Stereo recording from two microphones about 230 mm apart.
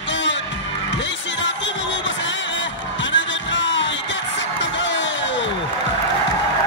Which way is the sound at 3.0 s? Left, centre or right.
Left.